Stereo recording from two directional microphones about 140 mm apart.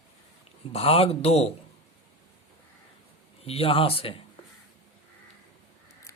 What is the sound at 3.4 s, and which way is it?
Speech, 45° left (ahead or behind).